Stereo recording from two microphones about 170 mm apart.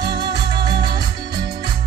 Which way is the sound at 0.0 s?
25° right (ahead or behind).